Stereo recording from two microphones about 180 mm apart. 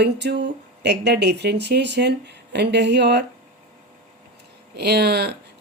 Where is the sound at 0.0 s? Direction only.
70° right (ahead or behind).